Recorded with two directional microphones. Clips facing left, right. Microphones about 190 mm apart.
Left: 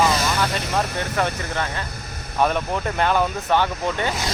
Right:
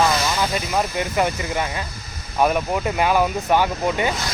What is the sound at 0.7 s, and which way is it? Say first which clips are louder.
Speech: right 2 dB; 10° right (ahead or behind).